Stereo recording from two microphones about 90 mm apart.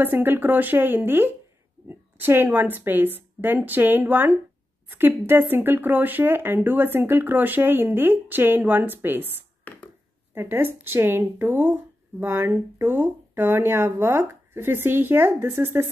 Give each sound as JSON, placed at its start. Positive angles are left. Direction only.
{"t": 0.0, "sound": "speech", "side_deg": -25}
{"t": 9.7, "sound": "a sound", "side_deg": 20}
{"t": 10.3, "sound": "speech", "side_deg": -25}